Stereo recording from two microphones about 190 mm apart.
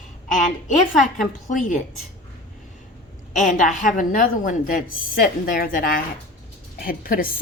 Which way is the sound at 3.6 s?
45° left (ahead or behind).